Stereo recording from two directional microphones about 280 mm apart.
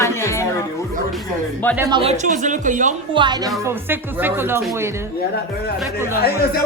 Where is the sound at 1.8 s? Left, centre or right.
Centre.